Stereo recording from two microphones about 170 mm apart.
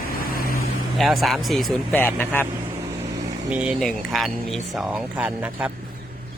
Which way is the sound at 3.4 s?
5° right (ahead or behind).